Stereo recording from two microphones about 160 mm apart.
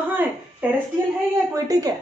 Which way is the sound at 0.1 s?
10° right (ahead or behind).